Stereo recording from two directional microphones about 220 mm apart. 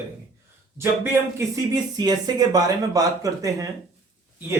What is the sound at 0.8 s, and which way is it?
Speech, 10° right (ahead or behind).